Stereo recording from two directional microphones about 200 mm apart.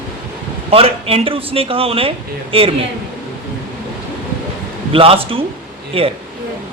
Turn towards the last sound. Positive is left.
turn(degrees=-30)  # may be behind; listen again after turning